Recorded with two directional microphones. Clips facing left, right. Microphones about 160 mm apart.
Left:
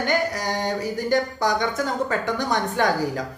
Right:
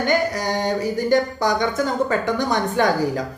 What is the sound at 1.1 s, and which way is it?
A woman's voice, 25° right (ahead or behind).